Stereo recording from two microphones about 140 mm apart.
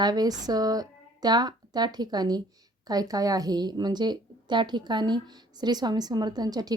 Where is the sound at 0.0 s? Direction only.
30° right (ahead or behind).